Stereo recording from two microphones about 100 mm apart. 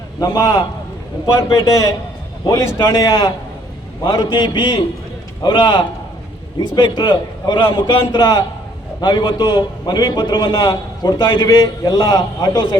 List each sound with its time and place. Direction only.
0.2 s a man's voice: 40° left (ahead or behind)
1.3 s a man's voice: 30° left (ahead or behind)